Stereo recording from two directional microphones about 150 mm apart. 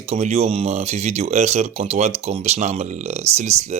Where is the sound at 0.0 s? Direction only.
45° right (ahead or behind).